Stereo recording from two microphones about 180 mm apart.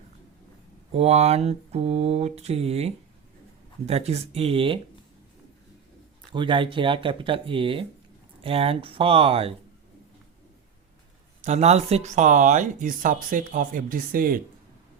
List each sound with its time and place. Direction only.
0.9 s mantra: 35° right (ahead or behind)
6.3 s speech: 25° right (ahead or behind)
8.4 s mantra: 30° right (ahead or behind)
11.4 s speech: 40° right (ahead or behind); by 14.4 s 55° right (ahead or behind)